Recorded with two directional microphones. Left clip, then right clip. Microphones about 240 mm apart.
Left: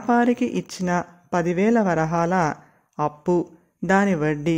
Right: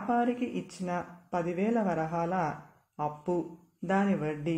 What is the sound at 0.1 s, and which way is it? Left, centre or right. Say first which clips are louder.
Speech: left 10 dB; left.